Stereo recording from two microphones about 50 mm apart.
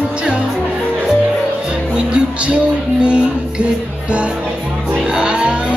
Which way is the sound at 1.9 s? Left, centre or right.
Right.